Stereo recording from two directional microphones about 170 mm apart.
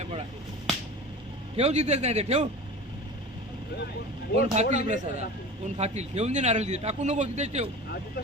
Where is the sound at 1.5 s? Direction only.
40° right (ahead or behind).